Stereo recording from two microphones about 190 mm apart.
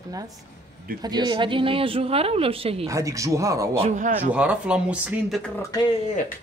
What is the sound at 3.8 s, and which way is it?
Speech, 40° right (ahead or behind).